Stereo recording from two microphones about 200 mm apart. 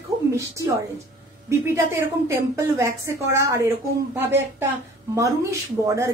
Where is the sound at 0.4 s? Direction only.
15° right (ahead or behind).